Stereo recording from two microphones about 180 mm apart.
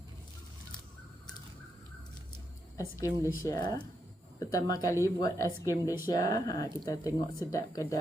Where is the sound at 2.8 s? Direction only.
20° left (ahead or behind).